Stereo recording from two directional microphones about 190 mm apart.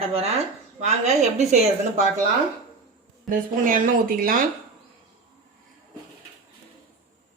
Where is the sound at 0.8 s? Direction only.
35° right (ahead or behind).